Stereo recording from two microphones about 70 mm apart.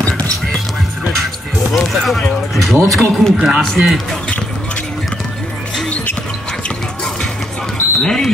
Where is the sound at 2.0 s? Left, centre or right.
Centre.